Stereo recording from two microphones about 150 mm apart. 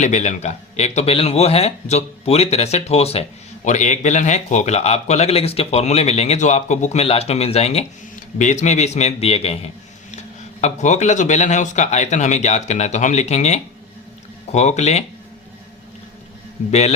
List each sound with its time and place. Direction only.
0.0 s a man's voice: 50° left (ahead or behind)
8.1 s a man's voice: 55° left (ahead or behind)
10.6 s a man's voice: 50° left (ahead or behind)
16.6 s a man's voice: 55° left (ahead or behind)